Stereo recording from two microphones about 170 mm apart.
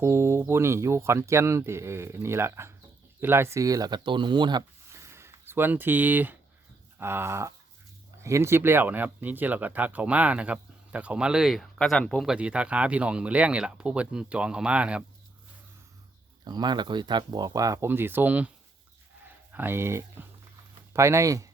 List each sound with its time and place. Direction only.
0.0 s speech: 15° right (ahead or behind)
16.4 s speech: 25° right (ahead or behind); by 18.5 s 10° right (ahead or behind)
19.5 s speech: 10° right (ahead or behind)